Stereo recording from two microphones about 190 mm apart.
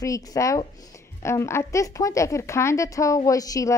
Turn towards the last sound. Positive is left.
turn(degrees=20)  # may be behind; listen again after turning